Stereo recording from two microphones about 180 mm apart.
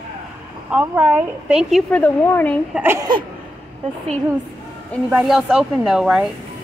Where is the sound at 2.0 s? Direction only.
10° left (ahead or behind).